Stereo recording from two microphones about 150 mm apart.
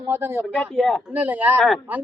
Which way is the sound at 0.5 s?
5° left (ahead or behind).